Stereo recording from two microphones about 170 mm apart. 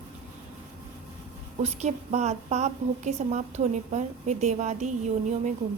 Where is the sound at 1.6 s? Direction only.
40° right (ahead or behind).